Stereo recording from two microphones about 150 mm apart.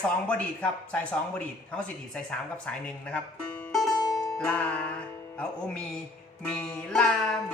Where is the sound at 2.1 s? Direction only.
5° left (ahead or behind).